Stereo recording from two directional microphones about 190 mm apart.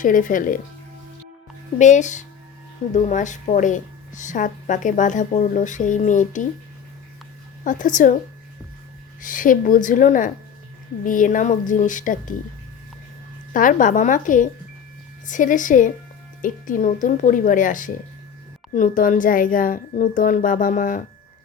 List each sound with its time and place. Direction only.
0.0 s speech: 45° left (ahead or behind)
1.8 s a woman's voice: 40° left (ahead or behind)
7.6 s speech: 45° left (ahead or behind)
9.2 s speech: 45° left (ahead or behind)
13.5 s speech: 45° left (ahead or behind)